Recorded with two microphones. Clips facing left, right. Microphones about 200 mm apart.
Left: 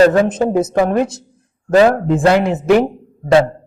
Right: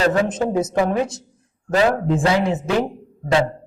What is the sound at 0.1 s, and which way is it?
A woman's voice, 60° left (ahead or behind).